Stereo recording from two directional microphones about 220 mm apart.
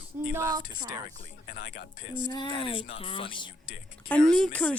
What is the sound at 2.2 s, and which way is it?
Speech, 20° left (ahead or behind).